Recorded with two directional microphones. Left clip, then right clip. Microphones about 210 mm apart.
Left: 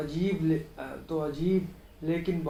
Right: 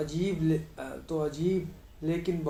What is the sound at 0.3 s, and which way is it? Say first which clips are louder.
Speech: left 4 dB; 50° right (ahead or behind).